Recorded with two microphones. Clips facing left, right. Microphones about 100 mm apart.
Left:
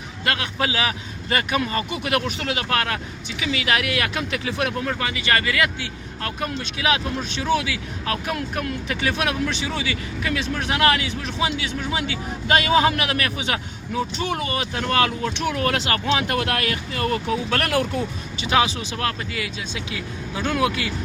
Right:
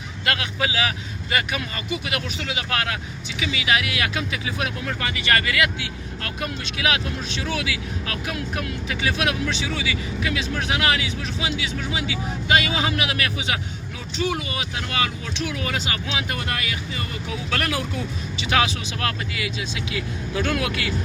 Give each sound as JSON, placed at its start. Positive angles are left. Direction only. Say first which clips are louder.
{"t": 0.3, "sound": "a man's voice", "louder": "left 1 dB", "side_deg": 35}
{"t": 4.9, "sound": "a man's voice", "louder": "even", "side_deg": 25}
{"t": 8.4, "sound": "speech", "louder": "left 2 dB", "side_deg": 45}
{"t": 16.4, "sound": "speech", "louder": "left 4 dB", "side_deg": 70}
{"t": 18.5, "sound": "a man's voice", "louder": "left 2 dB", "side_deg": 30}